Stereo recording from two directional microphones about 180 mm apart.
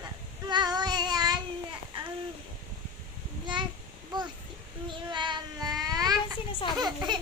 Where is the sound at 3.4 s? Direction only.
25° right (ahead or behind).